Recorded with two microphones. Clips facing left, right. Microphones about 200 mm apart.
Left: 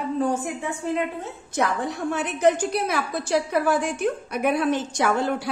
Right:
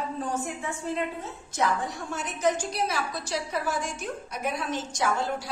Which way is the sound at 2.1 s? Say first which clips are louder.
Left 6 dB; 65° left (ahead or behind).